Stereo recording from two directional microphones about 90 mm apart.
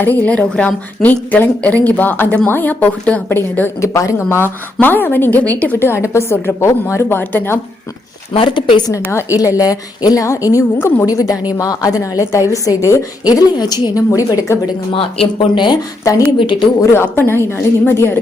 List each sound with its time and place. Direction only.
0.0 s a woman's voice: 15° left (ahead or behind)
3.8 s a woman's voice: 35° left (ahead or behind); by 5.9 s 15° left (ahead or behind)
5.9 s a woman's voice: 30° left (ahead or behind)
8.3 s speech: 75° left (ahead or behind)
9.1 s a woman's voice: 35° left (ahead or behind)
10.8 s a woman's voice: 20° left (ahead or behind)
11.0 s a woman's voice: 45° left (ahead or behind)
15.4 s speech: 60° left (ahead or behind)
16.1 s a woman's voice: 40° left (ahead or behind)
16.4 s speech: 65° left (ahead or behind)
16.9 s a woman's voice: 25° left (ahead or behind)